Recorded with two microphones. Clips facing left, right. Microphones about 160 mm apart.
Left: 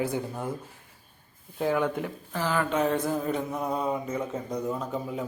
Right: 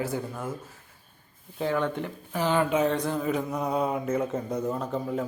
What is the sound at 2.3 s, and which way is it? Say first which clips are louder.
Speech: right 3 dB; 20° right (ahead or behind).